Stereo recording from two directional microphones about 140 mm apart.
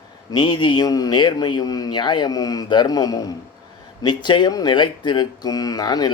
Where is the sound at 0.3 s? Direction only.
30° left (ahead or behind).